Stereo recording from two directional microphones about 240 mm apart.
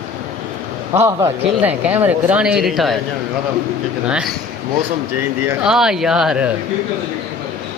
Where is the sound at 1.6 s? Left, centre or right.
Centre.